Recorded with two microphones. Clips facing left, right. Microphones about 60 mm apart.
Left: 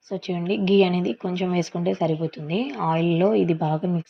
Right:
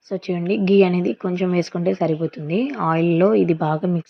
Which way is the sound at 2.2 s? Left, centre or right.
Right.